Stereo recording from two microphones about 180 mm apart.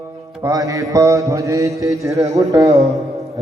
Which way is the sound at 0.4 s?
20° right (ahead or behind).